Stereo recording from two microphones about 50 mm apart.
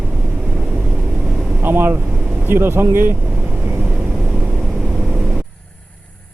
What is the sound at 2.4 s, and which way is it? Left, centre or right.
Speech, right.